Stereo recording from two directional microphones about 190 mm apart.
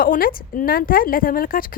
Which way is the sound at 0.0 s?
50° left (ahead or behind).